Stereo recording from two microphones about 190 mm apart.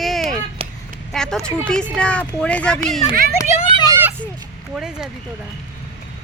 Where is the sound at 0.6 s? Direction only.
30° right (ahead or behind).